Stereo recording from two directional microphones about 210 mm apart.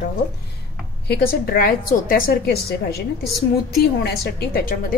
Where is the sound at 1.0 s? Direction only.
45° left (ahead or behind).